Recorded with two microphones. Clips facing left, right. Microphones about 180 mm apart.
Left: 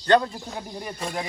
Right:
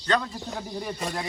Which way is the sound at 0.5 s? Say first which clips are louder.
Right 1 dB; 10° left (ahead or behind).